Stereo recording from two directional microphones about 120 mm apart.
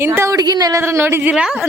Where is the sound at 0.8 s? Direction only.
20° right (ahead or behind).